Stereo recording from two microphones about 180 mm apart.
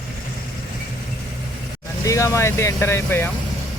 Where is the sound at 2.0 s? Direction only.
15° left (ahead or behind).